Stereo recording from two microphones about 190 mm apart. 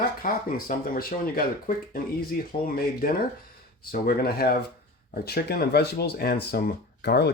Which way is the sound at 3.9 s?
55° left (ahead or behind).